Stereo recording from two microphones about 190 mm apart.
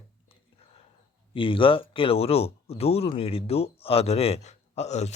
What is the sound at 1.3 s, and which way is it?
Speech, 25° left (ahead or behind).